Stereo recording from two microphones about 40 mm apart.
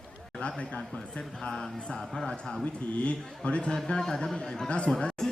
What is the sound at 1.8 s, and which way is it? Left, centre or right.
Speech, left.